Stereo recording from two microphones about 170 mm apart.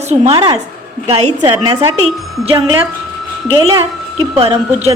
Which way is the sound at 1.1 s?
35° right (ahead or behind).